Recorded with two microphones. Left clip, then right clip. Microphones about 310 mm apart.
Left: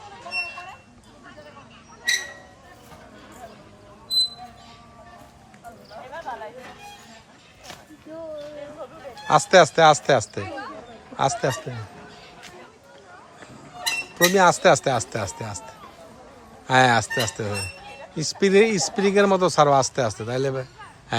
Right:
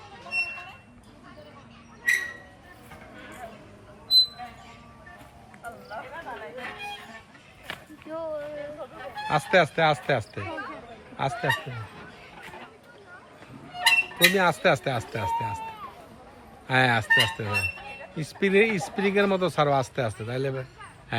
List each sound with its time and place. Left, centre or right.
0.2 s a sound: left
6.3 s music: left
9.2 s speech: centre
13.8 s speech: centre
16.6 s speech: centre
21.1 s a sound: centre